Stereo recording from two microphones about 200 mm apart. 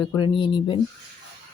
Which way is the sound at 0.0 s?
25° left (ahead or behind).